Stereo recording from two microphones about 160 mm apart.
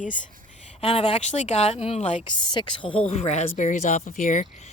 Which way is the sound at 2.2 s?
30° left (ahead or behind).